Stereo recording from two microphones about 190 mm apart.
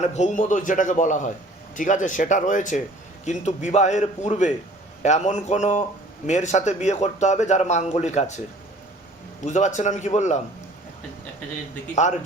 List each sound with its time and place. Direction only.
0.0 s a man's voice: 40° left (ahead or behind)
9.5 s a man's voice: 40° left (ahead or behind)